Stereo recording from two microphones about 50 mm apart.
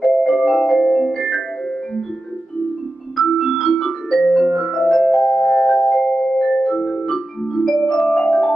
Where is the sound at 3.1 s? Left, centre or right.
Centre.